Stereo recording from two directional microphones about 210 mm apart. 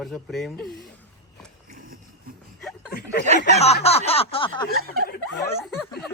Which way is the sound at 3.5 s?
30° left (ahead or behind).